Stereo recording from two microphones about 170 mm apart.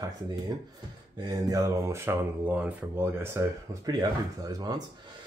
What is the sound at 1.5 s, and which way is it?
Speech, 15° right (ahead or behind).